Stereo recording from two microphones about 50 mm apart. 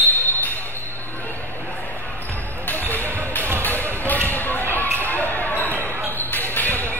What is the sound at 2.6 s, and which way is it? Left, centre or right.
Basketball bounce, left.